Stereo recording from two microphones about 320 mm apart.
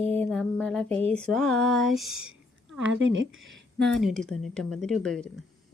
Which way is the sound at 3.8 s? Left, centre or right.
Centre.